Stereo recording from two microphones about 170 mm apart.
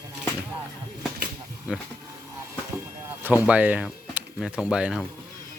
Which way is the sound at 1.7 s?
5° right (ahead or behind).